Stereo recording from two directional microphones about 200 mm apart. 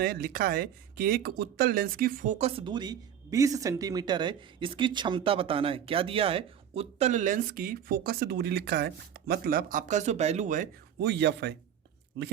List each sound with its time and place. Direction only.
0.0 s speech: 50° right (ahead or behind)
11.0 s speech: 60° right (ahead or behind)